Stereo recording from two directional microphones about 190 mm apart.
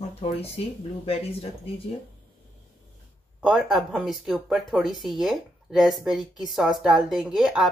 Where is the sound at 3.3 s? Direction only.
5° right (ahead or behind).